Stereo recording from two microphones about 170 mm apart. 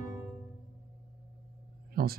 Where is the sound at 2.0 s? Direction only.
60° right (ahead or behind).